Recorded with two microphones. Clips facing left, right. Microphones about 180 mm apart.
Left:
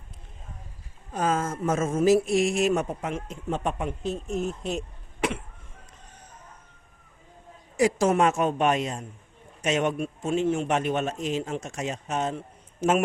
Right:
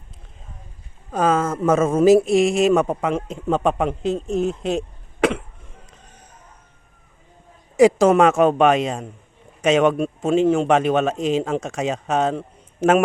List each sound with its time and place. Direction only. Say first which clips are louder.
1.1 s a man's voice: right 7 dB; 70° right (ahead or behind); by 4.8 s 90° right
8.1 s a man's voice: right 8 dB; 90° right